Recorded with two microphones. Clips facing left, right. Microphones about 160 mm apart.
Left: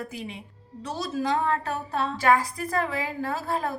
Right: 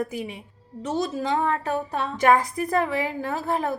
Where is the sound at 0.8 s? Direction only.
20° right (ahead or behind).